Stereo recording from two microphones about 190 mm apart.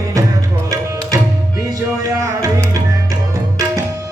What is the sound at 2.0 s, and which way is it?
Music, 20° right (ahead or behind).